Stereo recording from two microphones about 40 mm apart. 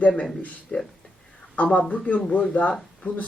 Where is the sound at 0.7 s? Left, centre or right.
Left.